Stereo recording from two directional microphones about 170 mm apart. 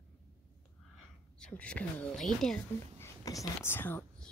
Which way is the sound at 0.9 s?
5° left (ahead or behind).